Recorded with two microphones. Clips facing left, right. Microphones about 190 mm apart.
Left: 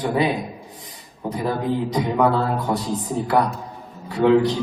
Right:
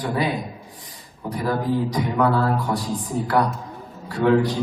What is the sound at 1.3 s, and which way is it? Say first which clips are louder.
Speech: even; 20° left (ahead or behind).